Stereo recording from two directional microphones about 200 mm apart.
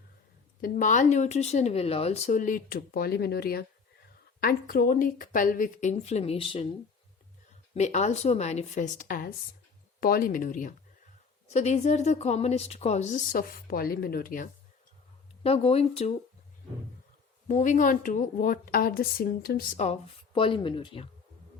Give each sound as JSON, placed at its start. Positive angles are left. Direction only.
{"t": 0.6, "sound": "a woman's voice", "side_deg": 40}
{"t": 7.7, "sound": "a woman's voice", "side_deg": 35}
{"t": 15.4, "sound": "speech", "side_deg": 30}
{"t": 17.5, "sound": "a woman's voice", "side_deg": 40}
{"t": 20.3, "sound": "speech", "side_deg": 25}